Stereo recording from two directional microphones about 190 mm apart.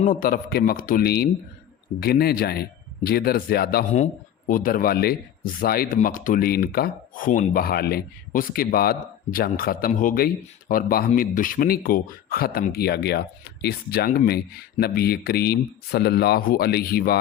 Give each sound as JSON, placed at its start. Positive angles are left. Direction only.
{"t": 0.0, "sound": "speech", "side_deg": 45}
{"t": 3.9, "sound": "speech", "side_deg": 40}